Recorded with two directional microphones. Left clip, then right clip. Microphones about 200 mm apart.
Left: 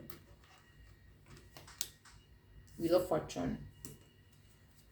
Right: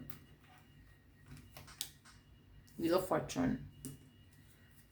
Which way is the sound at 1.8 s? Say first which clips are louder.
Left 2 dB; 10° left (ahead or behind).